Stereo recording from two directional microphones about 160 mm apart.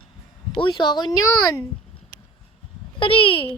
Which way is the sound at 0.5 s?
25° left (ahead or behind).